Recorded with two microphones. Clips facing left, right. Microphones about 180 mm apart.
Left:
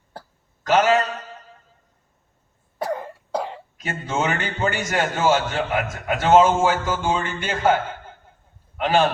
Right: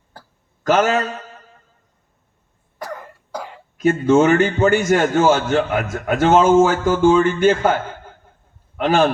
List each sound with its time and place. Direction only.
0.7 s a man's voice: 45° right (ahead or behind)
2.7 s cough: 25° left (ahead or behind)
3.8 s a man's voice: 45° right (ahead or behind)
8.8 s a man's voice: 45° right (ahead or behind)